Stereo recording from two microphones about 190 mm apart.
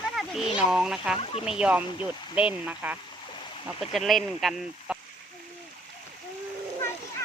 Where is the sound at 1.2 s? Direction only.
30° left (ahead or behind).